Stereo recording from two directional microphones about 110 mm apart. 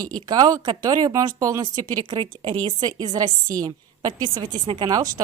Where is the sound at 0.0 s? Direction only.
35° right (ahead or behind).